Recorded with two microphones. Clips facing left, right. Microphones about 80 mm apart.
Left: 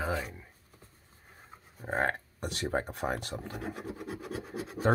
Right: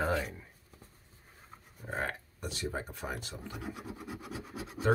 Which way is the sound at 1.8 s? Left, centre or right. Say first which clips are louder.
Left 6 dB; left.